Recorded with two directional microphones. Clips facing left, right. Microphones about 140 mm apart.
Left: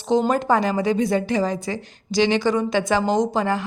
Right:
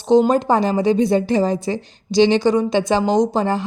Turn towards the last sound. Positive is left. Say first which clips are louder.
# right 3 dB
turn(degrees=-30)  # may be behind; listen again after turning